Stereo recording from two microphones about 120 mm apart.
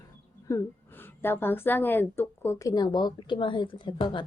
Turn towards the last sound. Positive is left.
turn(degrees=40)  # may be behind; listen again after turning